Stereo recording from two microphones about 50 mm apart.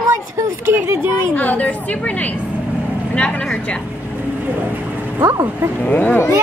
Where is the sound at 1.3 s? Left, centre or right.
Left.